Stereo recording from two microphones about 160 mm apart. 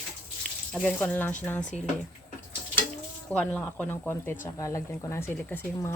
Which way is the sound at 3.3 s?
10° left (ahead or behind).